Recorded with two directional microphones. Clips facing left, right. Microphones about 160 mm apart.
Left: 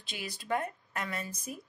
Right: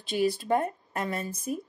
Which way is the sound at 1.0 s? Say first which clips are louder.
Right 6 dB; 45° right (ahead or behind).